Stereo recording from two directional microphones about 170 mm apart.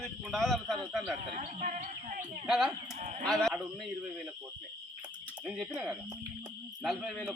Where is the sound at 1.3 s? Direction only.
40° right (ahead or behind).